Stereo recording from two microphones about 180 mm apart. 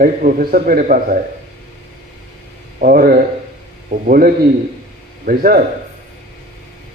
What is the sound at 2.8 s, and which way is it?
A man's voice, 50° right (ahead or behind).